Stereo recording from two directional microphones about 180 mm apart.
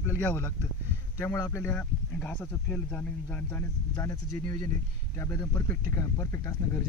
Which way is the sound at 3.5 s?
20° left (ahead or behind).